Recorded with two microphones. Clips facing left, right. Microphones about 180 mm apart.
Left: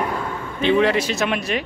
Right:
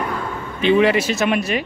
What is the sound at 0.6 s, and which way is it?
Speech, 10° right (ahead or behind).